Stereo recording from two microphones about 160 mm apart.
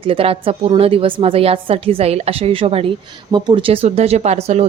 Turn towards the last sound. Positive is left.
turn(degrees=-40)  # may be behind; listen again after turning